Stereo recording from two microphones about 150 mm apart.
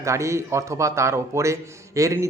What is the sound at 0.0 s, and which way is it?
A man's voice, 20° right (ahead or behind).